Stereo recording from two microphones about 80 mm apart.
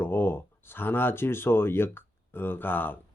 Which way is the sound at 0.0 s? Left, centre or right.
Left.